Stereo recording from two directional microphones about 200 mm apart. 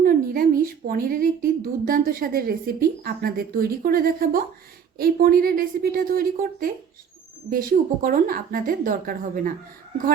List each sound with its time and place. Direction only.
0.0 s a woman's voice: 45° right (ahead or behind)